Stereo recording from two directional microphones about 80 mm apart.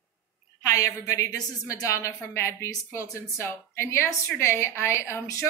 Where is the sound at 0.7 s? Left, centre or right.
Left.